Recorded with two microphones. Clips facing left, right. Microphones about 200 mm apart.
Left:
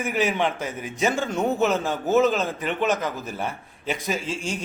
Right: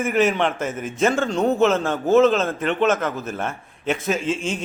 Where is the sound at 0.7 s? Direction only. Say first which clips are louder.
Right 4 dB; 50° right (ahead or behind).